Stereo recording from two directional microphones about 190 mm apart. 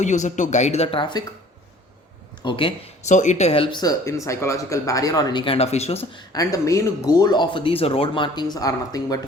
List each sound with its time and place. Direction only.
0.0 s speech: 40° left (ahead or behind)
2.4 s speech: 25° left (ahead or behind)
6.3 s speech: 20° left (ahead or behind)